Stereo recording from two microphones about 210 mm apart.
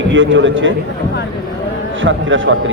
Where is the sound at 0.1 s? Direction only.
65° right (ahead or behind).